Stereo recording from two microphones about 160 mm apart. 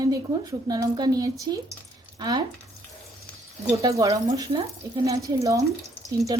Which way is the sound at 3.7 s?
20° right (ahead or behind).